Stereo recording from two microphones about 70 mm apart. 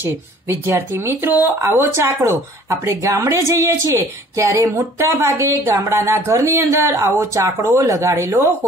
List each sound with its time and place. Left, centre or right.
0.0 s a woman's voice: right